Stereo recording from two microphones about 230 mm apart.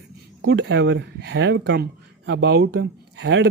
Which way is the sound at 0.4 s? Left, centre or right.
Right.